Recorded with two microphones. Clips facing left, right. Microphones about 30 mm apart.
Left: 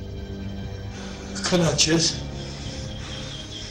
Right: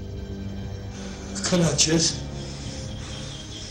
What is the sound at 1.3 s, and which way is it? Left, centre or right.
Speech, centre.